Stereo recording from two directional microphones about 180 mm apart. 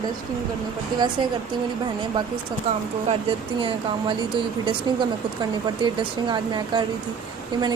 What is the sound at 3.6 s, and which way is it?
Speech, 25° right (ahead or behind).